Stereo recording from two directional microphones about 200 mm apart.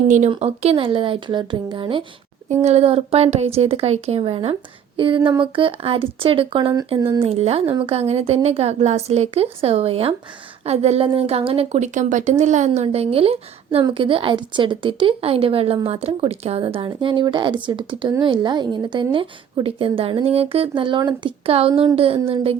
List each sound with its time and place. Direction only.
0.1 s speech: 35° right (ahead or behind)